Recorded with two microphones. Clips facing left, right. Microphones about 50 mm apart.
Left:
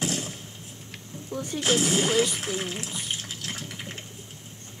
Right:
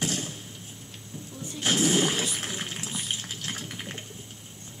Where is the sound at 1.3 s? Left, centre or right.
Left.